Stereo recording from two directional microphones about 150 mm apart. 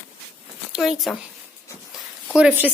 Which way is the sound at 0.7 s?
Centre (ahead or behind).